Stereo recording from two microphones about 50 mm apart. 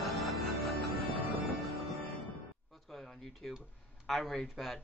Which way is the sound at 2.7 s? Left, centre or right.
Centre.